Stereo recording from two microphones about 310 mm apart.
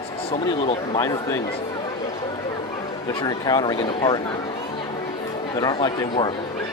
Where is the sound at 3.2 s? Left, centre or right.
Centre.